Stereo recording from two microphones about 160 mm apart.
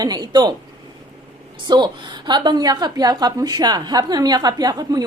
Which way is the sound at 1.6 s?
30° right (ahead or behind).